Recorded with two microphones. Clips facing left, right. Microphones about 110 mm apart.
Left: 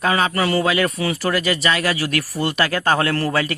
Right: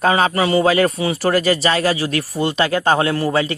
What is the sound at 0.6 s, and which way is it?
Speech, 35° right (ahead or behind).